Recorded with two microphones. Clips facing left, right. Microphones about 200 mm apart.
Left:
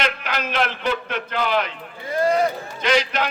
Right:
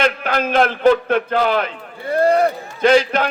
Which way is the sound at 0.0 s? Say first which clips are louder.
Right 7 dB; 50° right (ahead or behind).